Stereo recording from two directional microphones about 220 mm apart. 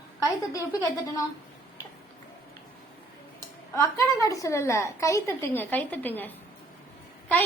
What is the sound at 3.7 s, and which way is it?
A child's voice, 15° left (ahead or behind).